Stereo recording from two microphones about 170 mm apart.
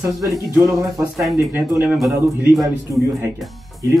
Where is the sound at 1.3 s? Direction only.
20° left (ahead or behind).